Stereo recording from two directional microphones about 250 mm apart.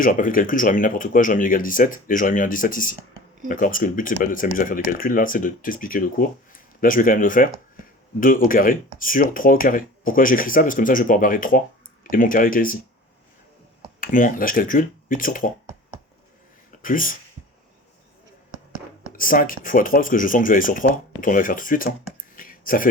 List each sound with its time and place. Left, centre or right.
0.0 s speech: left
14.0 s speech: left
16.8 s speech: left
19.1 s speech: left
22.4 s a sound: left